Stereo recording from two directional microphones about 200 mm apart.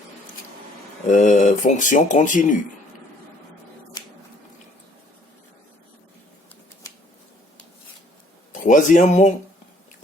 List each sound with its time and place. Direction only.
1.0 s speech: 40° left (ahead or behind)
8.5 s speech: 40° left (ahead or behind)